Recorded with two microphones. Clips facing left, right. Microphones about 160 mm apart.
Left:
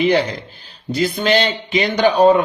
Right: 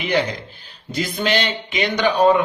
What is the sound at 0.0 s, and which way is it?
Speech, 30° left (ahead or behind).